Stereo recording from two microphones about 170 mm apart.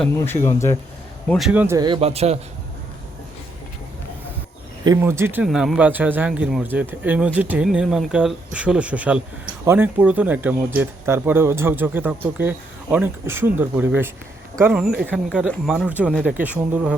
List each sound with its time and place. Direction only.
0.3 s speech: 15° left (ahead or behind)
1.3 s speech: 5° right (ahead or behind)
1.8 s speech: 30° right (ahead or behind)
4.9 s speech: 15° right (ahead or behind)
5.5 s speech: centre (ahead or behind)